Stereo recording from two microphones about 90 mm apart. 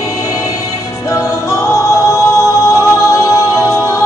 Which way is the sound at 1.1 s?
35° left (ahead or behind).